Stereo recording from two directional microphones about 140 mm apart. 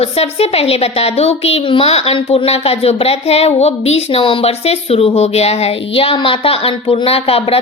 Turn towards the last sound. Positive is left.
turn(degrees=45)  # may be behind; listen again after turning